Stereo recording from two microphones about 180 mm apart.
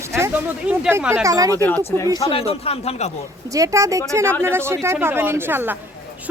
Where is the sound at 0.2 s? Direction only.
10° right (ahead or behind).